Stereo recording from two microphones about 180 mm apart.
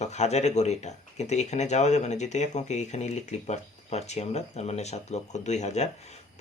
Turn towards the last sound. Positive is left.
turn(degrees=40)  # may be behind; listen again after turning